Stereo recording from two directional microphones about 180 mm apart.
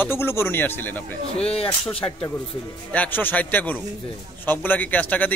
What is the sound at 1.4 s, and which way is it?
Speech, 35° left (ahead or behind).